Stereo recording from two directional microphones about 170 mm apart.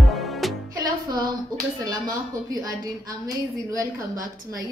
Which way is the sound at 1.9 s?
20° right (ahead or behind).